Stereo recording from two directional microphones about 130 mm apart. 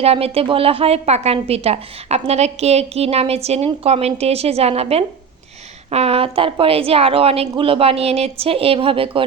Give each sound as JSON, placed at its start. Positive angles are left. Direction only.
{"t": 0.0, "sound": "a woman's voice", "side_deg": -50}